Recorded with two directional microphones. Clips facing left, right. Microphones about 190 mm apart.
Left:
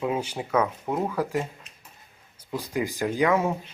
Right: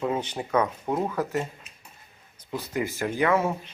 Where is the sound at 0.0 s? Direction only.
10° left (ahead or behind).